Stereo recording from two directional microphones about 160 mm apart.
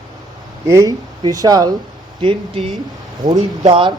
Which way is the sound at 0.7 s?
20° right (ahead or behind).